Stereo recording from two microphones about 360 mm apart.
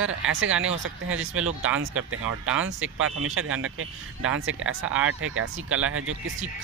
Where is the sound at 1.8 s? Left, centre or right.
Right.